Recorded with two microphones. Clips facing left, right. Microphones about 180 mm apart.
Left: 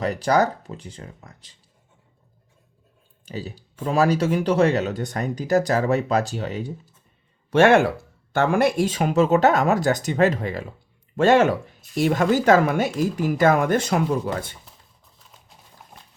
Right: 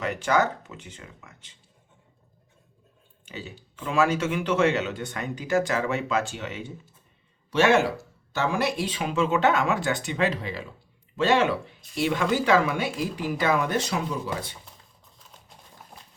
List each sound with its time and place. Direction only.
0.0 s speech: 35° left (ahead or behind)
3.2 s speech: 35° left (ahead or behind)
7.5 s speech: 55° left (ahead or behind)